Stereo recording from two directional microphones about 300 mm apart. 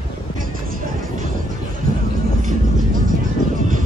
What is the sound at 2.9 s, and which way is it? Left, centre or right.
Music, right.